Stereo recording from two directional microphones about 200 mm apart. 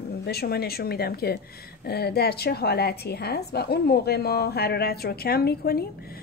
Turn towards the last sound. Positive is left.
turn(degrees=50)  # may be behind; listen again after turning